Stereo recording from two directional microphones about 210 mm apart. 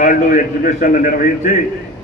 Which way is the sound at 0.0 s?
35° left (ahead or behind).